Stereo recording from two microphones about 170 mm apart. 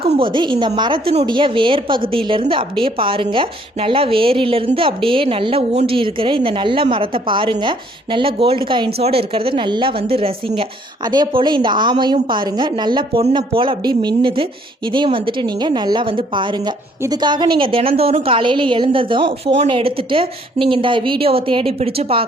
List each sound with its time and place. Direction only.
0.2 s a woman's voice: 30° right (ahead or behind)